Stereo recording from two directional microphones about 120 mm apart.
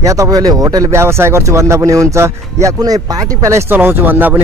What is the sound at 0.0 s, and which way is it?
Speech, 25° right (ahead or behind).